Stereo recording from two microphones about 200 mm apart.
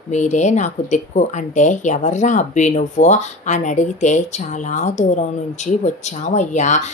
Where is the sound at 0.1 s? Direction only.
35° left (ahead or behind).